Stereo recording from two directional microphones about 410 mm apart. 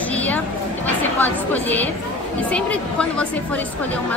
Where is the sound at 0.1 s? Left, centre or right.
Centre.